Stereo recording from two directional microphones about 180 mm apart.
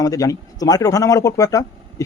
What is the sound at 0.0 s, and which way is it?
Speech, 20° left (ahead or behind).